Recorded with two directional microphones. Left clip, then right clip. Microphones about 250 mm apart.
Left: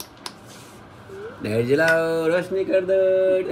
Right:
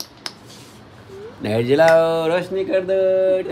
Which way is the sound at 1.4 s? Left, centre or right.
Right.